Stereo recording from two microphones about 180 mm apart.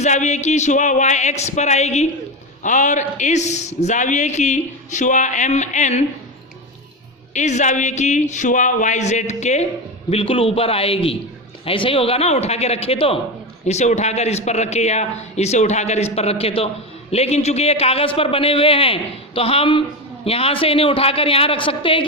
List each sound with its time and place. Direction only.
0.0 s speech: 40° left (ahead or behind)
7.3 s speech: 40° left (ahead or behind)